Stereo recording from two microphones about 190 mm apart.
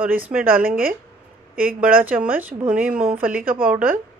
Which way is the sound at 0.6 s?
50° right (ahead or behind).